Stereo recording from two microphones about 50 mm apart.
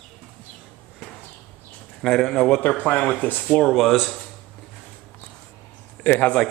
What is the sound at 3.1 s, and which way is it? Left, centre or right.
Speech, left.